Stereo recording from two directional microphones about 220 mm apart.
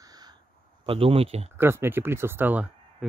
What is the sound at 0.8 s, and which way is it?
Speech, 25° right (ahead or behind).